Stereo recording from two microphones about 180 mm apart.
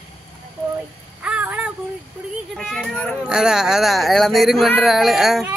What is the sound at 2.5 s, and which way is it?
Speech, centre (ahead or behind).